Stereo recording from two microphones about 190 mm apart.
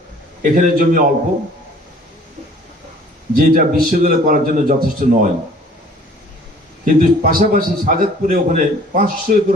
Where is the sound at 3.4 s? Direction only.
50° right (ahead or behind).